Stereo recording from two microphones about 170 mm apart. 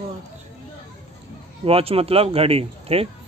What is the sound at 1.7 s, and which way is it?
Speech, 35° right (ahead or behind).